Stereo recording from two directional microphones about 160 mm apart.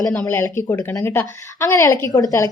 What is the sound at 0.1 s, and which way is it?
A woman's voice, 15° left (ahead or behind).